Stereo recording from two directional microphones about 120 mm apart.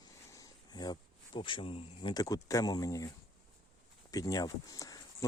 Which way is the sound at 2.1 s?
30° left (ahead or behind).